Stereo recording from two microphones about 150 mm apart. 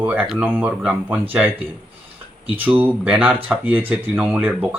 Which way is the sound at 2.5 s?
10° right (ahead or behind).